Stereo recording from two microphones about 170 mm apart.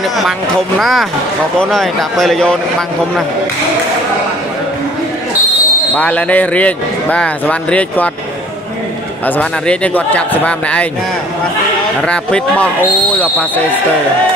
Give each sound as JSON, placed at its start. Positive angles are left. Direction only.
{"t": 0.7, "sound": "a man's voice", "side_deg": 0}
{"t": 5.9, "sound": "a man's voice", "side_deg": 10}
{"t": 9.2, "sound": "a man's voice", "side_deg": 10}
{"t": 12.0, "sound": "a man's voice", "side_deg": 5}